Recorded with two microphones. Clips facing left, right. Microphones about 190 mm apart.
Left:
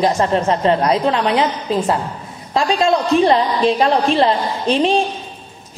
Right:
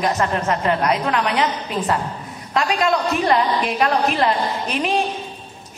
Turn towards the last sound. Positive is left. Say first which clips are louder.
# left 6 dB
turn(degrees=30)  # may be behind; listen again after turning